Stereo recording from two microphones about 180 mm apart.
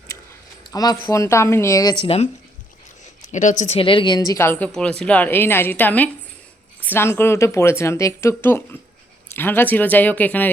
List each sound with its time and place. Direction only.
0.7 s speech: 20° left (ahead or behind)
3.3 s a woman's voice: 45° left (ahead or behind)
3.8 s speech: 30° left (ahead or behind); by 10.5 s 10° left (ahead or behind)